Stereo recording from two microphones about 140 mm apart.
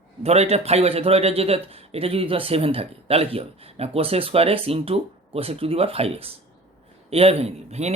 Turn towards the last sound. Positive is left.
turn(degrees=-50)  # may be behind; listen again after turning